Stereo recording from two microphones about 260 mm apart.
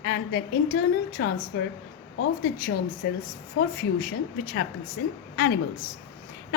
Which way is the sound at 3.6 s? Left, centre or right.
Left.